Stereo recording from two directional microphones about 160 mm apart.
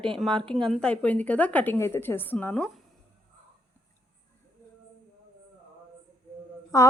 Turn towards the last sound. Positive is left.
turn(degrees=20)  # may be behind; listen again after turning